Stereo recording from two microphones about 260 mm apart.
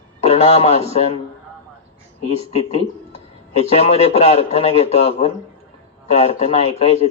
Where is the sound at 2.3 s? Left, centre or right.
Left.